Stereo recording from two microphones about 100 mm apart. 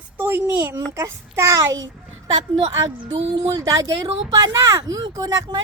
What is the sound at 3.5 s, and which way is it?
Speech, 35° right (ahead or behind).